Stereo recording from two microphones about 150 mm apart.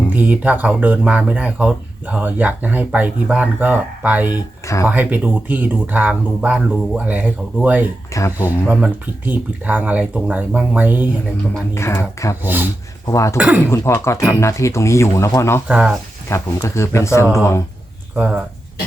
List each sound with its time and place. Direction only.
0.1 s speech: 10° right (ahead or behind)
4.6 s speech: 20° left (ahead or behind)
4.9 s speech: 10° right (ahead or behind)
8.1 s speech: 20° left (ahead or behind)
8.4 s speech: 10° right (ahead or behind)
11.7 s speech: 20° left (ahead or behind)
12.4 s speech: 10° right (ahead or behind)
13.1 s speech: 20° left (ahead or behind)
13.3 s speech: 5° right (ahead or behind)
13.7 s speech: 20° left (ahead or behind)
15.6 s speech: 5° right (ahead or behind)
16.3 s speech: 20° left (ahead or behind)